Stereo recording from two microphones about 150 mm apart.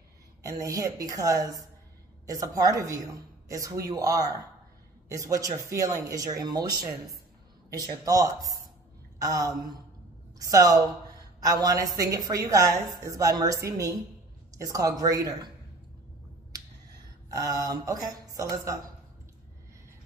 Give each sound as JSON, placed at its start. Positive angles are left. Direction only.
{"t": 0.5, "sound": "a woman's voice", "side_deg": -25}
{"t": 17.3, "sound": "a woman's voice", "side_deg": -25}